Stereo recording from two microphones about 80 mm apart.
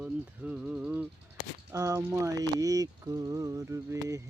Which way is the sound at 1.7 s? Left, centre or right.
Right.